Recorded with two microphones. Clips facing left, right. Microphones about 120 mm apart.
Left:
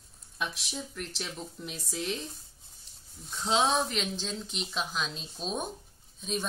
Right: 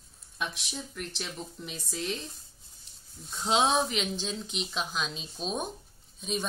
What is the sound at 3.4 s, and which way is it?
Speech, 15° right (ahead or behind).